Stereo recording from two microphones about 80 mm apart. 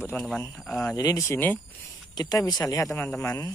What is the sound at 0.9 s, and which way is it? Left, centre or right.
Speech, left.